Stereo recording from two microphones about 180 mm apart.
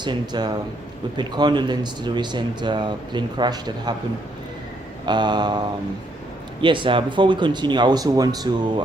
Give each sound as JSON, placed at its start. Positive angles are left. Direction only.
{"t": 0.0, "sound": "speech", "side_deg": -25}
{"t": 5.0, "sound": "speech", "side_deg": -25}